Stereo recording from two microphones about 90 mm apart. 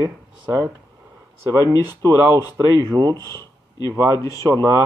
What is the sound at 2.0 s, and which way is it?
A man's voice, 40° right (ahead or behind).